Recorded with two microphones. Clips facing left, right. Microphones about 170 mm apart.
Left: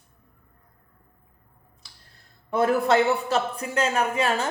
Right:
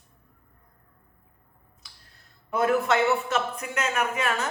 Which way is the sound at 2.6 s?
35° left (ahead or behind).